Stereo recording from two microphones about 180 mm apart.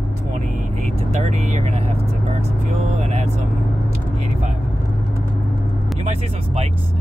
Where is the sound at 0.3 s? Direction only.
45° right (ahead or behind).